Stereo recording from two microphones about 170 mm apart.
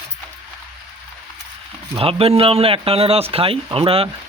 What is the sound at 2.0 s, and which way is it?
Speech, 35° right (ahead or behind).